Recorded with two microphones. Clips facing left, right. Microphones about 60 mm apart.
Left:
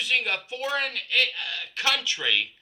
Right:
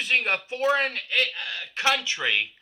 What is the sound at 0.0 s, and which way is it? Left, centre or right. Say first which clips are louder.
Speech: right 2 dB; right.